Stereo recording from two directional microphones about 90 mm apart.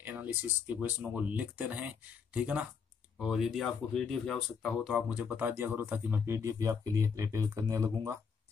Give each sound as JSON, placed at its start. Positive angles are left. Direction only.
{"t": 0.0, "sound": "speech", "side_deg": -20}
{"t": 5.1, "sound": "speech", "side_deg": -20}